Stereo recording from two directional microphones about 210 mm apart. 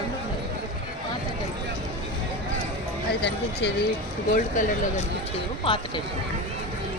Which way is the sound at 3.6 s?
60° left (ahead or behind).